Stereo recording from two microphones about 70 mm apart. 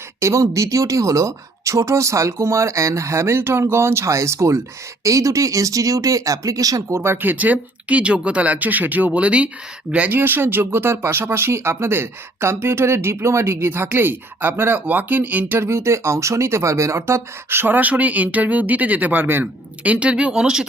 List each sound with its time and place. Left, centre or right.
0.2 s speech: right
6.9 s speech: right
7.2 s speech: right
10.2 s speech: right; by 20.7 s centre